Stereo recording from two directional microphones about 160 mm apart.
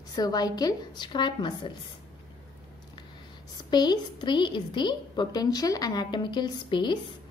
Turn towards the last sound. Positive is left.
turn(degrees=30)  # may be behind; listen again after turning